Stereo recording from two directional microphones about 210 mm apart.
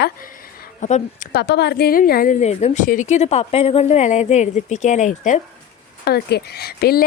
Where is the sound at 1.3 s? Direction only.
50° left (ahead or behind); by 5.4 s 35° left (ahead or behind).